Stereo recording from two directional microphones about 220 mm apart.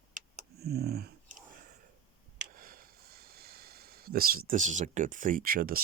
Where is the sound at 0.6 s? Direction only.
45° right (ahead or behind).